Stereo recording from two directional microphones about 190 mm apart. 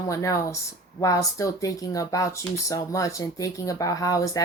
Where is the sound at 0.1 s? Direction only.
15° left (ahead or behind).